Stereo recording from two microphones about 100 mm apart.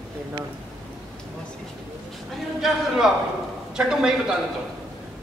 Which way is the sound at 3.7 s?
5° right (ahead or behind).